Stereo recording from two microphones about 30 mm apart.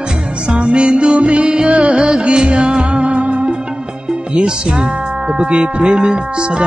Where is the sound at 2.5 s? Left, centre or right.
Centre.